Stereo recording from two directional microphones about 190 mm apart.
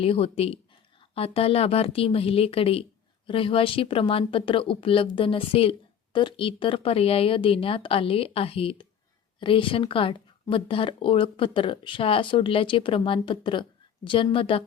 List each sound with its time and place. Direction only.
0.0 s a woman's voice: 30° left (ahead or behind)